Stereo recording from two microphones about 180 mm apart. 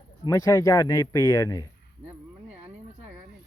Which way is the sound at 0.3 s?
15° left (ahead or behind).